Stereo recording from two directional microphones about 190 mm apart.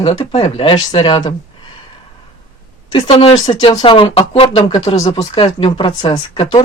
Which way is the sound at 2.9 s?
30° left (ahead or behind).